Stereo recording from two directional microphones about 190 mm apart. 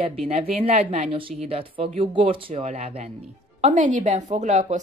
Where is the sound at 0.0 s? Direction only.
30° right (ahead or behind).